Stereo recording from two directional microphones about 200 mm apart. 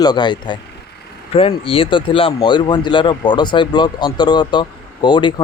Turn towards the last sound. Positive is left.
turn(degrees=20)  # may be behind; listen again after turning